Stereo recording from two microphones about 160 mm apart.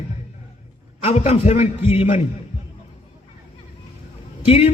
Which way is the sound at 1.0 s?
40° left (ahead or behind).